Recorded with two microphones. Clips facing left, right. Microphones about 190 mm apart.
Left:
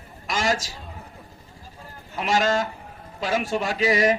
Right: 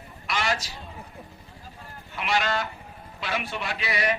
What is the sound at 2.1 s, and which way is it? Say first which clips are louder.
A man's voice: left 5 dB; 40° left (ahead or behind).